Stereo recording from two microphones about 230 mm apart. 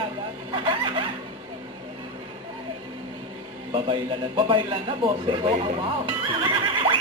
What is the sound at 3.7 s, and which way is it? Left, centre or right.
Speech, right.